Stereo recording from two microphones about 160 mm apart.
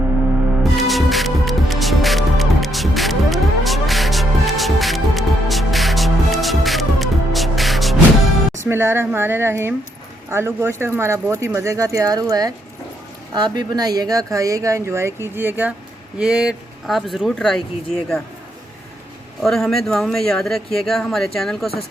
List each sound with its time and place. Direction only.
0.6 s music: centre (ahead or behind)
8.6 s a woman's voice: 15° right (ahead or behind); by 17.6 s 5° left (ahead or behind)
19.4 s speech: centre (ahead or behind)